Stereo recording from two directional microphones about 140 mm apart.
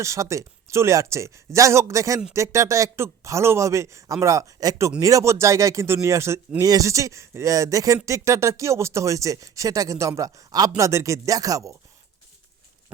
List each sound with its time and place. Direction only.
0.0 s speech: 20° right (ahead or behind)